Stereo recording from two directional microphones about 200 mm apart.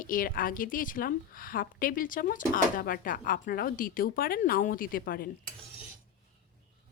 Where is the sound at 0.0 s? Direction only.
45° left (ahead or behind).